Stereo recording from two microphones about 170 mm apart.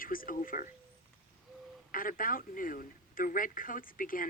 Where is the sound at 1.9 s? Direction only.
55° left (ahead or behind).